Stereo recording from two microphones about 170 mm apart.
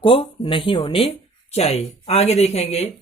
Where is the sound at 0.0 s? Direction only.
30° left (ahead or behind).